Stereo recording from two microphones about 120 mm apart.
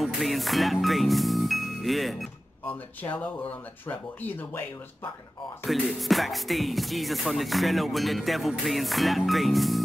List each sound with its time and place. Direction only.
0.0 s music: centre (ahead or behind)
2.6 s speech: 15° left (ahead or behind)
5.7 s speech: centre (ahead or behind)